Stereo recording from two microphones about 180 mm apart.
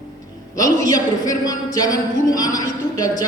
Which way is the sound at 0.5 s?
20° left (ahead or behind).